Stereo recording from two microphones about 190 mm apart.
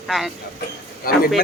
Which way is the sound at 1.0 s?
50° left (ahead or behind).